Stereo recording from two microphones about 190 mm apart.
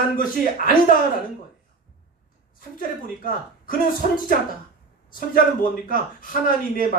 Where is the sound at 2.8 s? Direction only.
45° left (ahead or behind).